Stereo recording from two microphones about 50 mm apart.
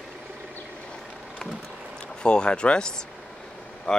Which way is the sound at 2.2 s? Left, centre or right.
Centre.